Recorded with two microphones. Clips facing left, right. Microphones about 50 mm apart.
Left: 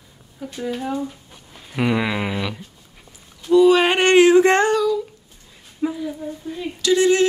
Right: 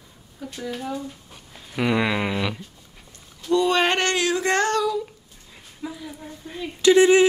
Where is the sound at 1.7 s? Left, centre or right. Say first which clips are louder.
Left 1 dB; centre.